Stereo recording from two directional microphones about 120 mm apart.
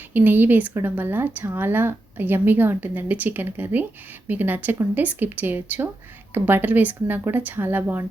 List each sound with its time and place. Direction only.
0.1 s speech: 15° right (ahead or behind)